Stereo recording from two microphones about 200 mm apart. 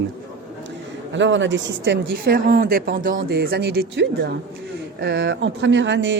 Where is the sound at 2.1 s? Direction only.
45° right (ahead or behind).